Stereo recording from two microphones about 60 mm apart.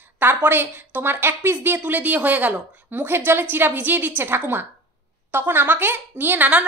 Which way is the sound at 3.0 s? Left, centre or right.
Right.